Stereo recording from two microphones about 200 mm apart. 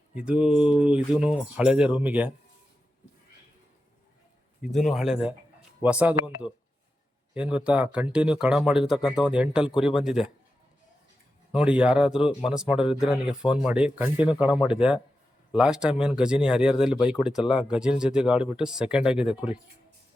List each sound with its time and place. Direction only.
0.1 s speech: 5° right (ahead or behind)
4.6 s speech: centre (ahead or behind)
11.5 s speech: 5° right (ahead or behind)